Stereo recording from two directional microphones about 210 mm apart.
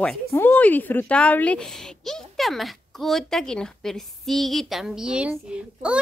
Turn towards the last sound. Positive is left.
turn(degrees=-5)  # may be behind; listen again after turning